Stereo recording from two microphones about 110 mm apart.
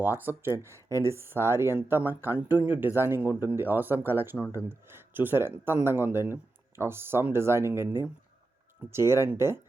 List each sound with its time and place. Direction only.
0.0 s speech: 20° right (ahead or behind)